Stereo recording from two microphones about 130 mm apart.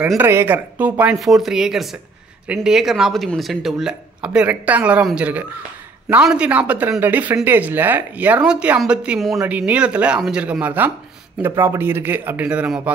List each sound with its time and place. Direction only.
0.2 s speech: 20° right (ahead or behind)
1.2 s speech: centre (ahead or behind)